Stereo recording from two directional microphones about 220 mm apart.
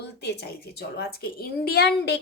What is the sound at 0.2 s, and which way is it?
Speech, 50° left (ahead or behind).